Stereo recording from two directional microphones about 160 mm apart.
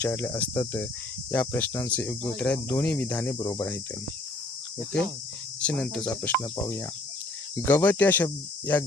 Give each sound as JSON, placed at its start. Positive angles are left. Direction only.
{"t": 0.0, "sound": "speech", "side_deg": 10}
{"t": 5.6, "sound": "speech", "side_deg": 5}